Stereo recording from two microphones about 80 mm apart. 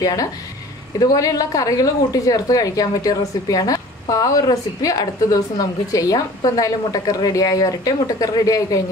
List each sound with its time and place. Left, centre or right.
0.0 s a woman's voice: left